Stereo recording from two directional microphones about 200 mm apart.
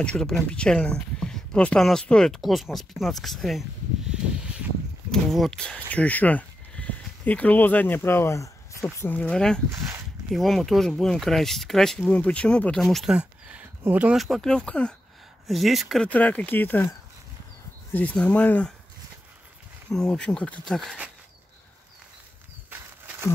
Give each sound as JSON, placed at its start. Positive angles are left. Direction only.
{"t": 0.0, "sound": "speech", "side_deg": 5}
{"t": 5.1, "sound": "speech", "side_deg": 0}
{"t": 17.9, "sound": "speech", "side_deg": 5}
{"t": 19.9, "sound": "speech", "side_deg": 5}